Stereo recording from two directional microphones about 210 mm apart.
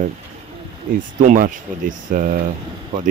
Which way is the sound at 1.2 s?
40° right (ahead or behind).